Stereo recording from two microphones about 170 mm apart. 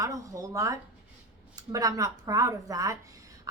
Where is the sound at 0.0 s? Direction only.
20° right (ahead or behind).